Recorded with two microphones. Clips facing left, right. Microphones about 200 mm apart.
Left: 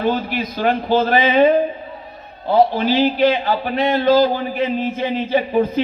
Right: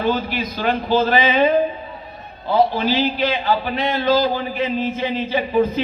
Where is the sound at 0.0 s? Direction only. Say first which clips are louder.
Left 1 dB; 55° left (ahead or behind).